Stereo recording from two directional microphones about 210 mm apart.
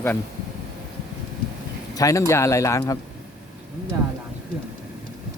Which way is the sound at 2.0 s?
15° left (ahead or behind).